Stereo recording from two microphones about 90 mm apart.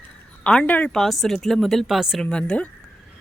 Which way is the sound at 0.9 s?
Centre (ahead or behind).